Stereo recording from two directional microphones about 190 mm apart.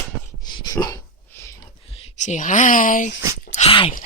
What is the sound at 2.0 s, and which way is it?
Speech, 40° left (ahead or behind).